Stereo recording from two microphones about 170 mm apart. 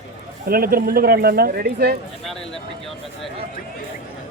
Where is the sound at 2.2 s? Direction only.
5° left (ahead or behind).